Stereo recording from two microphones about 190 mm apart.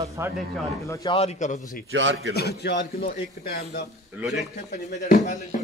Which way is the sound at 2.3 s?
60° left (ahead or behind).